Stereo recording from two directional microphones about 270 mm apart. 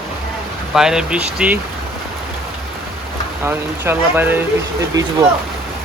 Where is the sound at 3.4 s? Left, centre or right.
Centre.